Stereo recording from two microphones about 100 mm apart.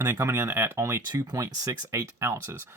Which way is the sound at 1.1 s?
40° right (ahead or behind).